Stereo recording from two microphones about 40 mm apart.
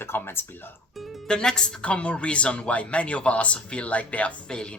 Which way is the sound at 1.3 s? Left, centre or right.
Centre.